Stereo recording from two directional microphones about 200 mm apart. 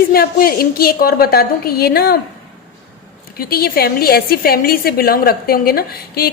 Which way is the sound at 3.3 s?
50° left (ahead or behind).